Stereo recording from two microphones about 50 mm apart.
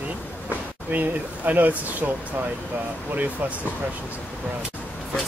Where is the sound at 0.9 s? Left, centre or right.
Right.